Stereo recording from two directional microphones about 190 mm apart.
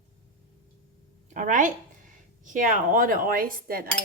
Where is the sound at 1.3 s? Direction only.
40° right (ahead or behind).